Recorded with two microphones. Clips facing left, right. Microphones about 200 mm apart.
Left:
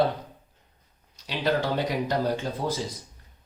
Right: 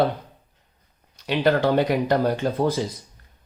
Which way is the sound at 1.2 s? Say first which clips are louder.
Right 6 dB; 60° right (ahead or behind).